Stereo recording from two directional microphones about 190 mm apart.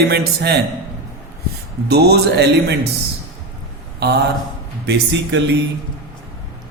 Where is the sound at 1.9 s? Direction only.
60° right (ahead or behind).